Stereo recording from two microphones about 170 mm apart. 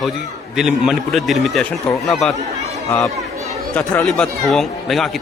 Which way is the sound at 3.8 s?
20° left (ahead or behind).